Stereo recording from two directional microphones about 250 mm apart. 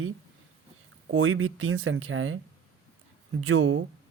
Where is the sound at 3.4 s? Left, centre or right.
Right.